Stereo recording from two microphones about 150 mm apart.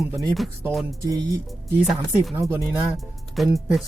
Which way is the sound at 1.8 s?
5° right (ahead or behind).